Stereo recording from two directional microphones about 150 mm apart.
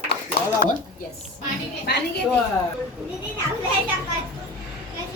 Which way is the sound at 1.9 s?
90° left.